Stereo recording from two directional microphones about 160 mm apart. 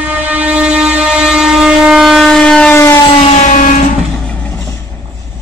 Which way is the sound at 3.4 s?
50° left (ahead or behind).